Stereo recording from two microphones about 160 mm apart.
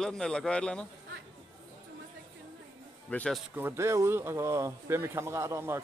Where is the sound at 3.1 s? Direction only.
5° left (ahead or behind).